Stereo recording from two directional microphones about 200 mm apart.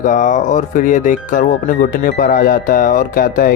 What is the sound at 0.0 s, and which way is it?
Speech, 40° left (ahead or behind).